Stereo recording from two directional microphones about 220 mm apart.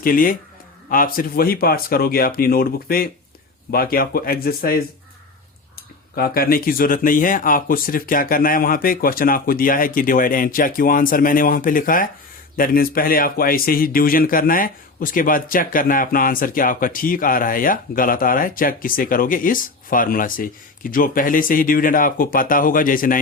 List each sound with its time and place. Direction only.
0.0 s a man's voice: 40° left (ahead or behind)
6.1 s a man's voice: 40° left (ahead or behind)